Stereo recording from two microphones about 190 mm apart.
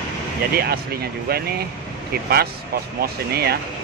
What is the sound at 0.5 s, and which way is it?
Speech, 55° right (ahead or behind).